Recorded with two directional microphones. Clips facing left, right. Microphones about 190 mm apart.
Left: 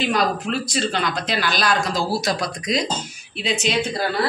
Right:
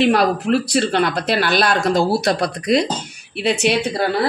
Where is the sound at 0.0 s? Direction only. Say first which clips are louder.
Right 6 dB; 60° right (ahead or behind).